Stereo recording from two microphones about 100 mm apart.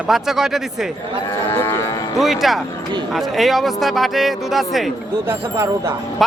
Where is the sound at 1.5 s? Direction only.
25° left (ahead or behind).